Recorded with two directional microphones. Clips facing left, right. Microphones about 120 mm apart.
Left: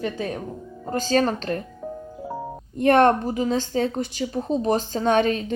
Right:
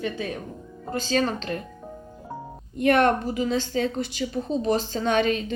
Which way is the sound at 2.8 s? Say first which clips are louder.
Left 3 dB; 35° left (ahead or behind).